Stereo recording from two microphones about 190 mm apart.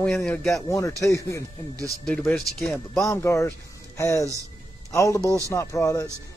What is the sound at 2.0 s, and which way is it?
Speech, 5° left (ahead or behind).